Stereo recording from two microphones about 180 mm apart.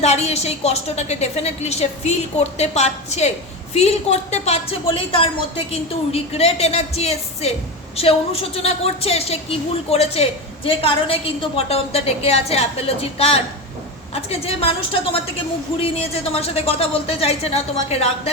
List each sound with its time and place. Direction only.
0.0 s a woman's voice: 35° left (ahead or behind)